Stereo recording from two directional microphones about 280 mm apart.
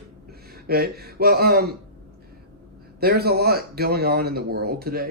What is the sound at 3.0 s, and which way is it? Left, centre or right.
Speech, right.